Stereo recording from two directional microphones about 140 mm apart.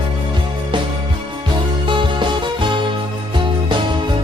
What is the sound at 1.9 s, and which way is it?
Music, 35° right (ahead or behind).